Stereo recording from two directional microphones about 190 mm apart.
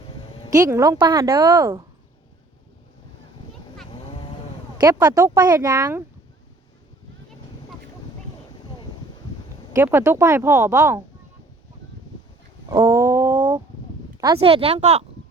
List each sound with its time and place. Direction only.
0.5 s a woman's voice: 15° right (ahead or behind)
4.8 s a woman's voice: 20° right (ahead or behind)
9.7 s a woman's voice: 10° right (ahead or behind)
12.8 s a sound: 15° right (ahead or behind)
14.3 s speech: 30° right (ahead or behind)